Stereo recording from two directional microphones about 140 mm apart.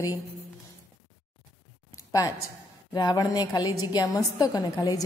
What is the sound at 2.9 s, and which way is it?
A woman's voice, 30° left (ahead or behind).